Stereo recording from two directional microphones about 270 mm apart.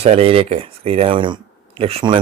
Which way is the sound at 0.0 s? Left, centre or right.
Right.